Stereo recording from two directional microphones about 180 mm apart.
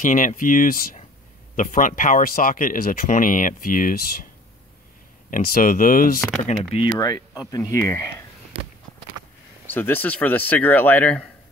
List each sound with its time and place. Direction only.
0.0 s speech: 45° left (ahead or behind)
5.3 s speech: 50° left (ahead or behind)
6.4 s speech: 35° left (ahead or behind)
7.0 s speech: 20° left (ahead or behind)
8.5 s a sound: 35° right (ahead or behind)
9.7 s speech: 10° left (ahead or behind)